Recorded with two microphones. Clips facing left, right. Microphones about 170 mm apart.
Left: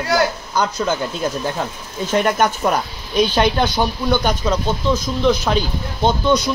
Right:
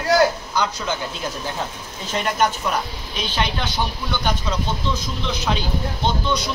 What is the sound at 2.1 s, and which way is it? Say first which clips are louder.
Speech: left 4 dB; 55° left (ahead or behind).